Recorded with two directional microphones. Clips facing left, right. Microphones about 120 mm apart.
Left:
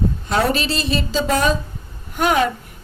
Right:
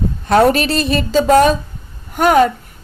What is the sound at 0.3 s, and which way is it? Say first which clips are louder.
A woman's voice: right 9 dB; 55° right (ahead or behind).